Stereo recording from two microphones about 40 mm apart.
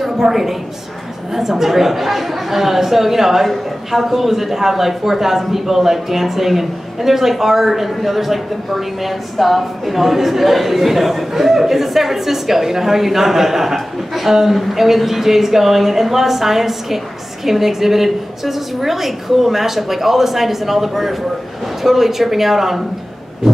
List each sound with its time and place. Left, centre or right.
0.0 s a woman's voice: centre